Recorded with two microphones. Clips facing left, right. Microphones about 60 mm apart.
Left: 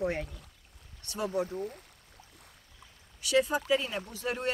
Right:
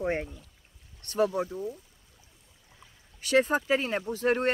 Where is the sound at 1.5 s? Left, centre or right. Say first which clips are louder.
Right 2 dB; left.